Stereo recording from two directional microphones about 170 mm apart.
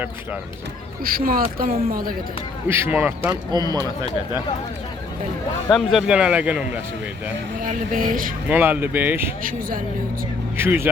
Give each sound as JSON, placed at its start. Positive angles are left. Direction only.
{"t": 1.0, "sound": "speech", "side_deg": -60}
{"t": 2.6, "sound": "speech", "side_deg": -15}
{"t": 5.6, "sound": "a man's voice", "side_deg": 0}
{"t": 7.6, "sound": "speech", "side_deg": -55}
{"t": 8.4, "sound": "speech", "side_deg": -10}
{"t": 9.4, "sound": "speech", "side_deg": -55}
{"t": 10.6, "sound": "speech", "side_deg": -15}